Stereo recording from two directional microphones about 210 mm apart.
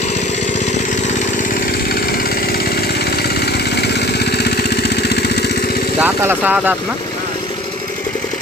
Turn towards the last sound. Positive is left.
turn(degrees=-10)  # may be behind; listen again after turning